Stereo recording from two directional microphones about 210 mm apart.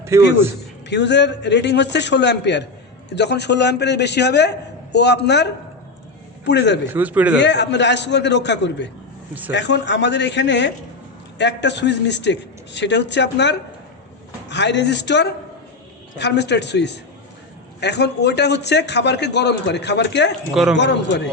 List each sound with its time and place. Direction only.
0.1 s speech: 15° right (ahead or behind)
0.9 s a man's voice: 55° left (ahead or behind)
6.9 s speech: 5° right (ahead or behind)
7.3 s a man's voice: 55° left (ahead or behind)
20.5 s speech: centre (ahead or behind)
20.7 s a man's voice: 55° left (ahead or behind)